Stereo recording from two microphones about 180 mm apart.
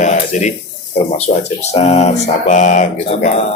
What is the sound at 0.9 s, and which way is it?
Speech, 35° left (ahead or behind).